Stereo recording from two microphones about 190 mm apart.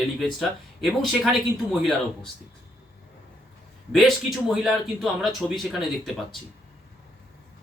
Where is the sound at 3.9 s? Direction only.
Centre (ahead or behind).